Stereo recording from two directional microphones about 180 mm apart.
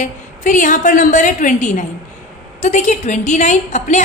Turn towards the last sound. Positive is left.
turn(degrees=40)  # may be behind; listen again after turning